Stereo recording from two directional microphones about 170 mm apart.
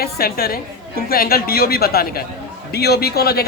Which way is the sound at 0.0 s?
60° left (ahead or behind).